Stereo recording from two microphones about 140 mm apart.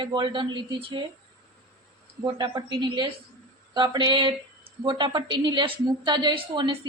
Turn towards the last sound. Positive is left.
turn(degrees=-35)  # may be behind; listen again after turning